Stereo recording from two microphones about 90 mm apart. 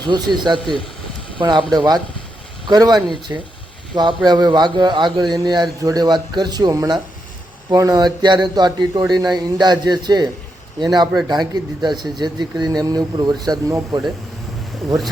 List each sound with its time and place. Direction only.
0.1 s speech: 60° right (ahead or behind)
1.7 s speech: 50° right (ahead or behind)